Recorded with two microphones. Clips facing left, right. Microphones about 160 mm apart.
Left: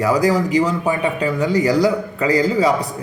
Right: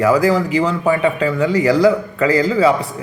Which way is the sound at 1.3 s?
40° left (ahead or behind).